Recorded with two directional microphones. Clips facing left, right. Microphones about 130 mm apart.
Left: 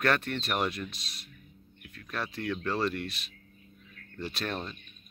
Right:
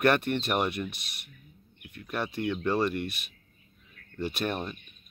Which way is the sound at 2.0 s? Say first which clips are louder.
Right 4 dB; 15° right (ahead or behind).